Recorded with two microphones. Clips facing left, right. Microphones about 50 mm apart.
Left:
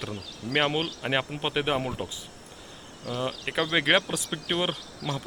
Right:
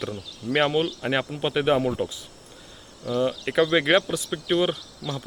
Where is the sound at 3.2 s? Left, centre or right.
Centre.